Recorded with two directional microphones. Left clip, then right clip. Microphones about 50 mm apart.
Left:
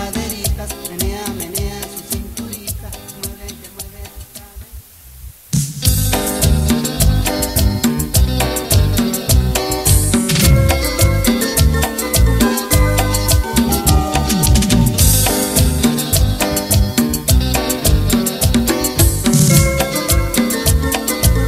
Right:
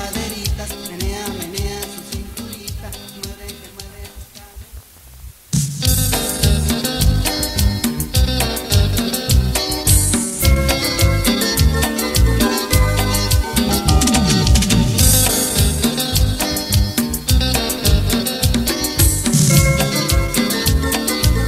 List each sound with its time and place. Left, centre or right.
0.0 s music: right
5.5 s music: right